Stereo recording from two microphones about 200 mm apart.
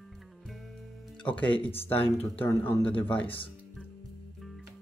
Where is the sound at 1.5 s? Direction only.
25° left (ahead or behind).